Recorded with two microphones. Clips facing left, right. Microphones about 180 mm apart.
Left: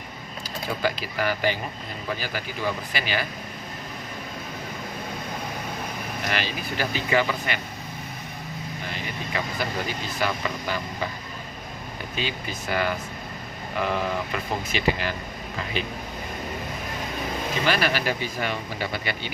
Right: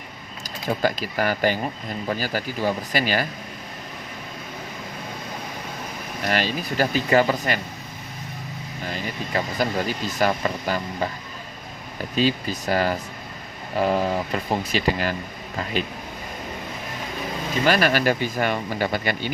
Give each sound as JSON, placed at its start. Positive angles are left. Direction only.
{"t": 0.8, "sound": "speech", "side_deg": -45}
{"t": 6.2, "sound": "speech", "side_deg": -40}
{"t": 8.9, "sound": "speech", "side_deg": -40}
{"t": 12.1, "sound": "speech", "side_deg": -35}
{"t": 17.7, "sound": "speech", "side_deg": -45}